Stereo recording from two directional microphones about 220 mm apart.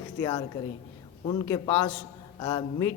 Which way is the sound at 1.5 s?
15° left (ahead or behind).